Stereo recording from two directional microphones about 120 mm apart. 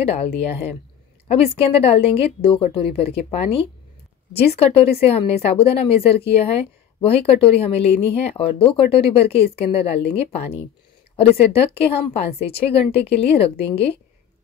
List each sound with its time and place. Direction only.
0.0 s a woman's voice: 55° left (ahead or behind)